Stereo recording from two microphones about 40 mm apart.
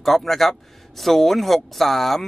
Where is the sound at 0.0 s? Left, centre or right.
Centre.